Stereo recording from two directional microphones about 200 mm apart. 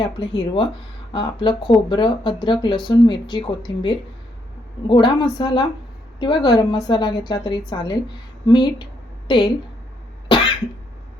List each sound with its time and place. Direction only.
0.0 s speech: 25° left (ahead or behind)